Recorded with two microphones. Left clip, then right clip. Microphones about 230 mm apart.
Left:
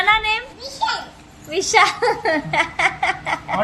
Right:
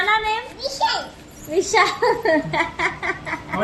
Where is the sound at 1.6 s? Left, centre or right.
Left.